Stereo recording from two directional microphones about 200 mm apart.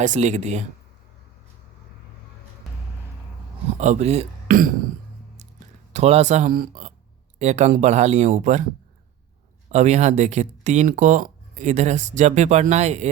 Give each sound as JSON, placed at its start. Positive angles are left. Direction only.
{"t": 0.0, "sound": "speech", "side_deg": -35}
{"t": 3.8, "sound": "speech", "side_deg": -35}
{"t": 5.4, "sound": "a sound", "side_deg": -35}
{"t": 7.3, "sound": "speech", "side_deg": -35}
{"t": 9.7, "sound": "speech", "side_deg": -35}